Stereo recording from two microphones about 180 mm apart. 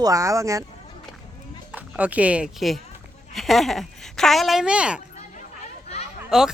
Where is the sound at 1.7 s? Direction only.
10° right (ahead or behind).